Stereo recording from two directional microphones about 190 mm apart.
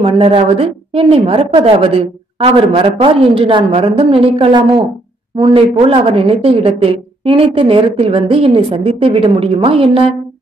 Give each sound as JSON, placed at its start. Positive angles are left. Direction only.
{"t": 0.0, "sound": "a woman's voice", "side_deg": -30}